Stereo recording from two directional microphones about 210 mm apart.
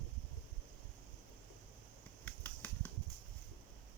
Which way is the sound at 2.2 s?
10° left (ahead or behind).